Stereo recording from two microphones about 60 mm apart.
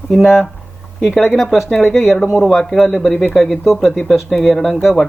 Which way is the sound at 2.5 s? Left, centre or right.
Centre.